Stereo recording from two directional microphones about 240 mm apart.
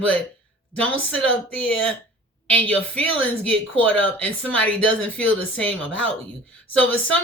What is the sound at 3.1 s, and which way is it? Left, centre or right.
Speech, right.